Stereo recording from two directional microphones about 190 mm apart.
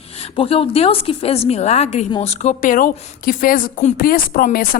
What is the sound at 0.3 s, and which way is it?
A woman's voice, 30° left (ahead or behind).